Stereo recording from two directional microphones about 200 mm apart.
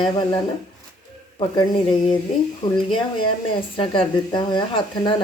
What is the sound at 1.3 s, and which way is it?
Speech, 25° left (ahead or behind).